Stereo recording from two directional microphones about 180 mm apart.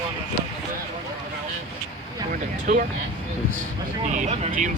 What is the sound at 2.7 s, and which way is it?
Speech, 45° right (ahead or behind).